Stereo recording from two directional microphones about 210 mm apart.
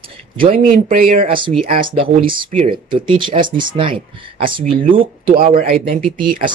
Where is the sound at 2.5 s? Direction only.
35° right (ahead or behind).